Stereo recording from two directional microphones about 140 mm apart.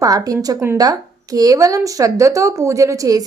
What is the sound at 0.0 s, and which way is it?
Speech, 25° right (ahead or behind).